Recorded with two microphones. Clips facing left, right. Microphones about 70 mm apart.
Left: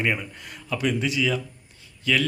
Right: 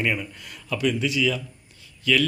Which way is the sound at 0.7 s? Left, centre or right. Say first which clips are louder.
Right 1 dB; left.